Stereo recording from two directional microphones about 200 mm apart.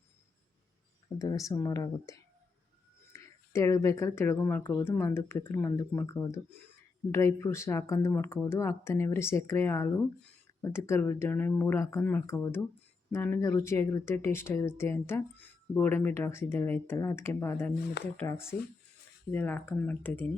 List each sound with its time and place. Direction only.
1.2 s speech: 15° left (ahead or behind)